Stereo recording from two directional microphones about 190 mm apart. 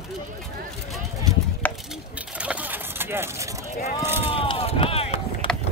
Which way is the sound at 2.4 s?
10° right (ahead or behind).